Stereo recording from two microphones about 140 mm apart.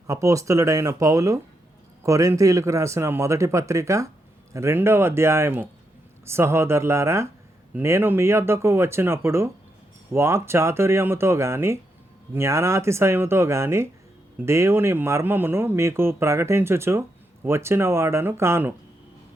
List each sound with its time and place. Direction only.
0.1 s a man's voice: 20° right (ahead or behind)